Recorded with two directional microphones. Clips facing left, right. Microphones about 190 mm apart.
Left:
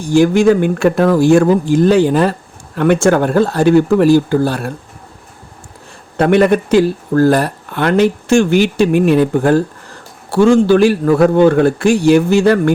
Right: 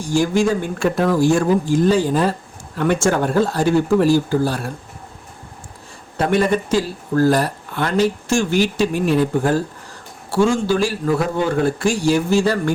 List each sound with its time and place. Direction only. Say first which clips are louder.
0.1 s speech: left 7 dB; 65° left (ahead or behind)
6.1 s speech: left 7 dB; 65° left (ahead or behind)